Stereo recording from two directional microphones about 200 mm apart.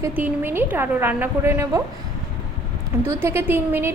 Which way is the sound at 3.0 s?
10° right (ahead or behind).